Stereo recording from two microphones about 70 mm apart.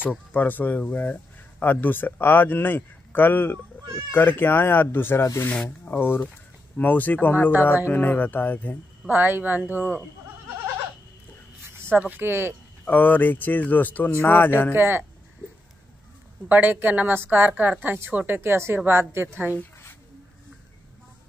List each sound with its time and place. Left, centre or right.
0.3 s speech: left
5.2 s speech: left
5.9 s speech: left
9.1 s a woman's voice: right
11.7 s a sound: right
12.2 s a woman's voice: right
12.8 s speech: left
14.7 s a woman's voice: right
16.4 s a woman's voice: right